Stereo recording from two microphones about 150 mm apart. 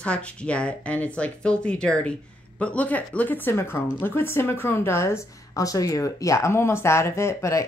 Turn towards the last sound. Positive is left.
turn(degrees=20)  # may be behind; listen again after turning